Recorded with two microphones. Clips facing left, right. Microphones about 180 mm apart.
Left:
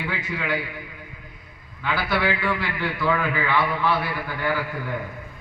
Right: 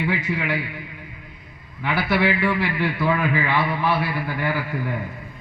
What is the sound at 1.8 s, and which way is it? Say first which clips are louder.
A man's voice: right 3 dB; 25° right (ahead or behind).